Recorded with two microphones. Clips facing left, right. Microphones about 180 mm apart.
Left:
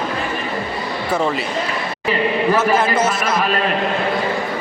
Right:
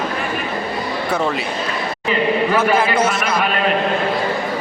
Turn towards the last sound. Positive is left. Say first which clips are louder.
# even
turn(degrees=25)  # may be behind; listen again after turning